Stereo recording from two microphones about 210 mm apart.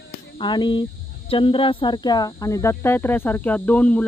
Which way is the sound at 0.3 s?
20° left (ahead or behind).